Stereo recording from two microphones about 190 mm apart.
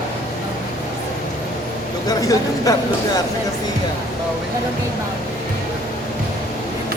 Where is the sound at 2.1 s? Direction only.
20° left (ahead or behind).